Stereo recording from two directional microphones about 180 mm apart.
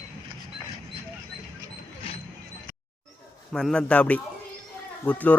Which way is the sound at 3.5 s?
5° left (ahead or behind).